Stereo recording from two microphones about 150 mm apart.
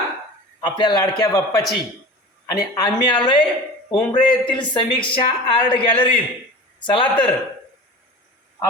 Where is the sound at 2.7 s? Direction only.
30° left (ahead or behind).